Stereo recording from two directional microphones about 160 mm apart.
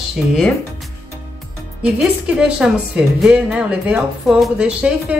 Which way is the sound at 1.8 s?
5° right (ahead or behind).